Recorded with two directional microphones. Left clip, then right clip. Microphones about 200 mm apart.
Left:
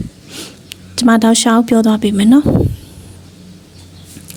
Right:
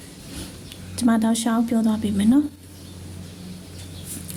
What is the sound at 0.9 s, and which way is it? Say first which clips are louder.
A woman's voice: left 11 dB; 40° left (ahead or behind).